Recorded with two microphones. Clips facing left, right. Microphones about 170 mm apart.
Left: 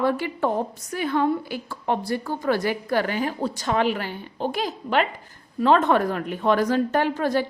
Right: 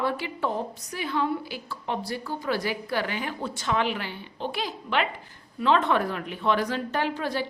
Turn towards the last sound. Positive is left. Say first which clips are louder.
# left 6 dB
turn(degrees=45)  # may be behind; listen again after turning